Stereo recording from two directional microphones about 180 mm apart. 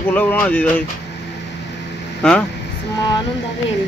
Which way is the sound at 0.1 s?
10° left (ahead or behind).